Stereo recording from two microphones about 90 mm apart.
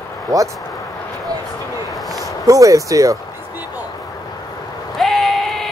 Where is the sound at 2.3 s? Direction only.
40° right (ahead or behind).